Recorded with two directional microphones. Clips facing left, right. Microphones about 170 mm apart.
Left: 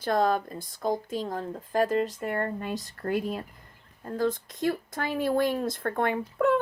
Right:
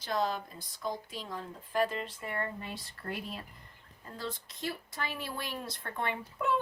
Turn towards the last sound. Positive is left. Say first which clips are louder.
# left 8 dB
turn(degrees=55)  # may be behind; listen again after turning